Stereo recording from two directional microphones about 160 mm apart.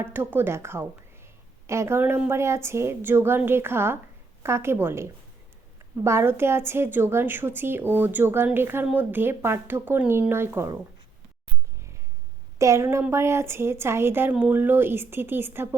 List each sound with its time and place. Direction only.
0.0 s a woman's voice: 15° right (ahead or behind)
12.5 s a woman's voice: 20° right (ahead or behind)